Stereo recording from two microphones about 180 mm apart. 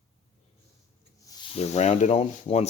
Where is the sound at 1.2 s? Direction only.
30° left (ahead or behind).